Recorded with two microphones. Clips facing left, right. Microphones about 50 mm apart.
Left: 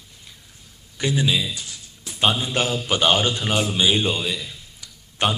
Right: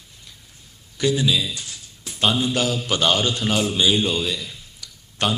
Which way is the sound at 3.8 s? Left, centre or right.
Left.